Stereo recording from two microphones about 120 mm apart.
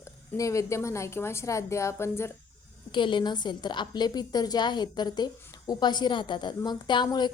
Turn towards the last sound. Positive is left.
turn(degrees=40)  # may be behind; listen again after turning